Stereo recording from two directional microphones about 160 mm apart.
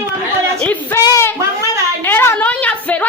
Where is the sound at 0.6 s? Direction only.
10° left (ahead or behind).